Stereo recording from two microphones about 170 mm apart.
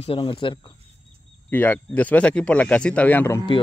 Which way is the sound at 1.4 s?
10° left (ahead or behind).